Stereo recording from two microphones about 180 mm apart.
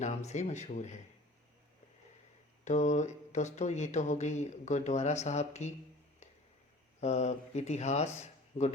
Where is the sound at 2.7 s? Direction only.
40° left (ahead or behind).